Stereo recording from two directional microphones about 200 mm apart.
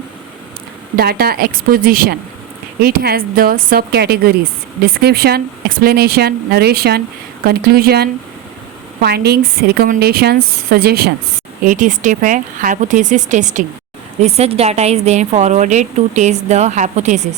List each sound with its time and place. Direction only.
0.9 s speech: 50° right (ahead or behind)
11.6 s a woman's voice: 40° right (ahead or behind)